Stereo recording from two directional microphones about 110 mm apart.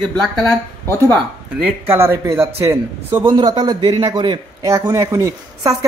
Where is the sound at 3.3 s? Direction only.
40° right (ahead or behind).